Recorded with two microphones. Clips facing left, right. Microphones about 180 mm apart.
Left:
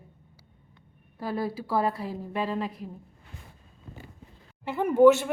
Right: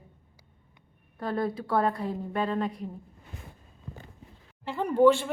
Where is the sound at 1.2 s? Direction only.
5° left (ahead or behind).